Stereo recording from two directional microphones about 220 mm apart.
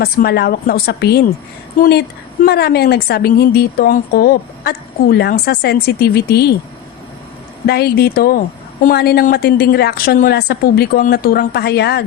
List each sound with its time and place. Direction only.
0.0 s a woman's voice: 45° left (ahead or behind)
7.7 s a woman's voice: 45° left (ahead or behind)